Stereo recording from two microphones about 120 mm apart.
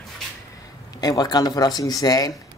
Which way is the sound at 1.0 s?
35° left (ahead or behind).